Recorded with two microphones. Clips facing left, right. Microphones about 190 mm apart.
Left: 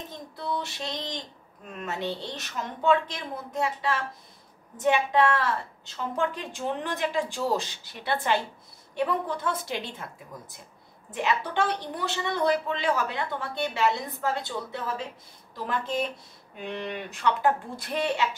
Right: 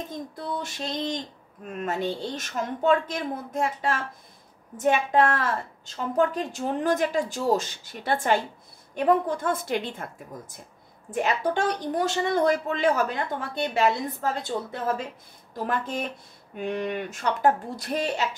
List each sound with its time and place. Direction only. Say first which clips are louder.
0.4 s a woman's voice: left 2 dB; 45° right (ahead or behind)
11.1 s a woman's voice: right 3 dB; 45° right (ahead or behind)